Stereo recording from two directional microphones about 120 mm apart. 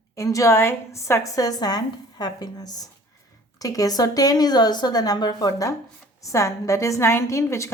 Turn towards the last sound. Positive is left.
turn(degrees=25)  # may be behind; listen again after turning